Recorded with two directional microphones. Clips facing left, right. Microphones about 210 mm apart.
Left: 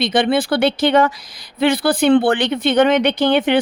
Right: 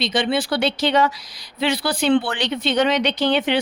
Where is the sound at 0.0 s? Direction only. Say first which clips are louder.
Left 5 dB; 55° left (ahead or behind).